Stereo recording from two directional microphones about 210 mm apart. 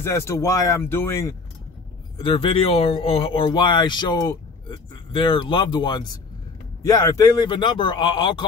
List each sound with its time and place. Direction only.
0.0 s speech: 15° left (ahead or behind)
2.1 s speech: 25° left (ahead or behind)